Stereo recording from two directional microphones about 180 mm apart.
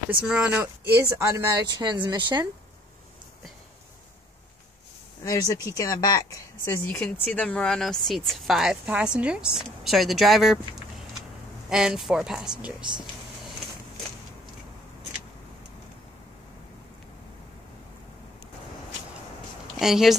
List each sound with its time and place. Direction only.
0.2 s speech: 5° right (ahead or behind); by 2.4 s 25° right (ahead or behind)
5.2 s speech: 20° left (ahead or behind); by 10.6 s centre (ahead or behind)
11.7 s speech: 5° right (ahead or behind)
19.8 s speech: centre (ahead or behind)